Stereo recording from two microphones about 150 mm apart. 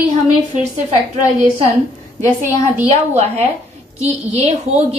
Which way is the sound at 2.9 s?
45° right (ahead or behind).